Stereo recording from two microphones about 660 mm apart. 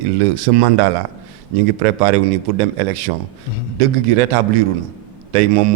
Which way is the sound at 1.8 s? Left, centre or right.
Right.